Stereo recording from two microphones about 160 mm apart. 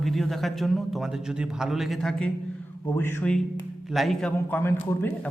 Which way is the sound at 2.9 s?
15° left (ahead or behind).